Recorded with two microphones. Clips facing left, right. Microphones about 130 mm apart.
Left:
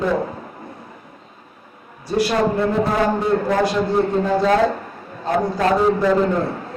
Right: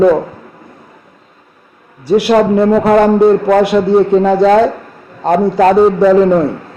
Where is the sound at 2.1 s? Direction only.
70° right (ahead or behind).